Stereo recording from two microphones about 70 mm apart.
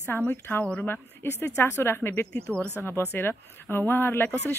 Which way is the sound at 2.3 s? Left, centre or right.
Centre.